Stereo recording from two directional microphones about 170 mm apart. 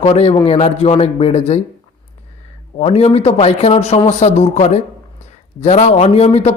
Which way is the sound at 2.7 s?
35° left (ahead or behind).